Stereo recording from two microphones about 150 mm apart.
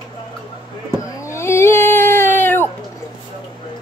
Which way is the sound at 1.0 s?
20° left (ahead or behind).